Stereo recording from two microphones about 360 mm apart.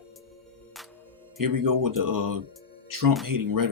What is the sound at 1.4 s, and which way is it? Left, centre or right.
Speech, right.